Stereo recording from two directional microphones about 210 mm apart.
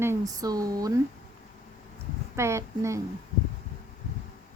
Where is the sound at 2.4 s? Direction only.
15° right (ahead or behind).